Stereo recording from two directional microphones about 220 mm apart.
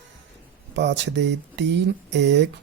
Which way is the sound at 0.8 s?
55° right (ahead or behind).